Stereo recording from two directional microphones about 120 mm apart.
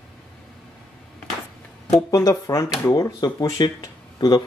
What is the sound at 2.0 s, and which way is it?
Speech, 30° left (ahead or behind).